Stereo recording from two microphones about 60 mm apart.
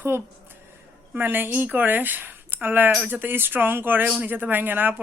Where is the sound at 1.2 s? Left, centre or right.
Right.